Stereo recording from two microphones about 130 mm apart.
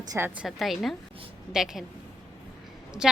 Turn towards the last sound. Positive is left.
turn(degrees=-5)  # may be behind; listen again after turning